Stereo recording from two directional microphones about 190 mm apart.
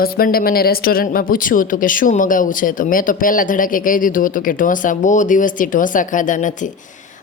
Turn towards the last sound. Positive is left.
turn(degrees=40)  # may be behind; listen again after turning